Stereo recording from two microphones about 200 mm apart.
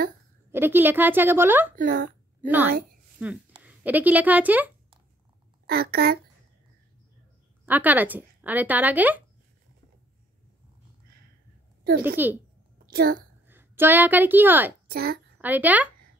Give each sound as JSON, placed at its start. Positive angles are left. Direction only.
{"t": 0.5, "sound": "speech", "side_deg": -10}
{"t": 1.8, "sound": "speech", "side_deg": -45}
{"t": 2.4, "sound": "a woman's voice", "side_deg": -10}
{"t": 5.7, "sound": "speech", "side_deg": -50}
{"t": 7.6, "sound": "speech", "side_deg": -10}
{"t": 12.2, "sound": "speech", "side_deg": -10}
{"t": 12.9, "sound": "speech", "side_deg": -50}
{"t": 13.5, "sound": "a woman's voice", "side_deg": -10}
{"t": 14.9, "sound": "a child's voice", "side_deg": -50}
{"t": 15.4, "sound": "speech", "side_deg": -10}